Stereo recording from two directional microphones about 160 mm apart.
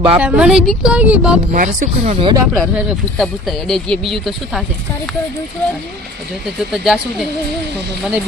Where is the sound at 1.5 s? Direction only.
60° right (ahead or behind).